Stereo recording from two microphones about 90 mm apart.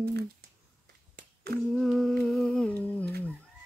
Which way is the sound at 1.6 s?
Centre (ahead or behind).